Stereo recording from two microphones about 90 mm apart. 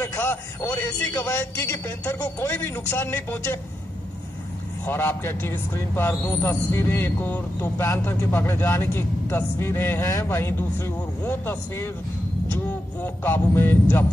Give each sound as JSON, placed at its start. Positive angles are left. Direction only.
{"t": 0.0, "sound": "a man's voice", "side_deg": 30}
{"t": 2.1, "sound": "a man's voice", "side_deg": 20}
{"t": 4.8, "sound": "a man's voice", "side_deg": 25}
{"t": 12.5, "sound": "a sound", "side_deg": 25}